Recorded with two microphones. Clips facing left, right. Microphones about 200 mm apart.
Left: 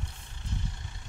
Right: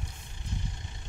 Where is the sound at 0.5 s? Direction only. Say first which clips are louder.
Even; 15° right (ahead or behind).